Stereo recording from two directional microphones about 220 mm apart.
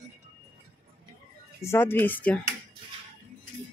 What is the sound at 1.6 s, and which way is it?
Speech, 10° left (ahead or behind).